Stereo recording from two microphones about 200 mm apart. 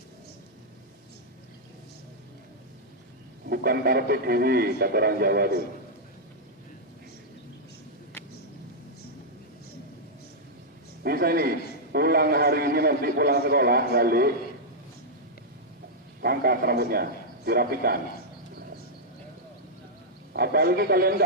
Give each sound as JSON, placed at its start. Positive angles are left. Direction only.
{"t": 3.5, "sound": "a man's voice", "side_deg": -50}
{"t": 11.0, "sound": "a man's voice", "side_deg": -50}
{"t": 16.2, "sound": "a man's voice", "side_deg": -50}
{"t": 20.3, "sound": "a man's voice", "side_deg": -50}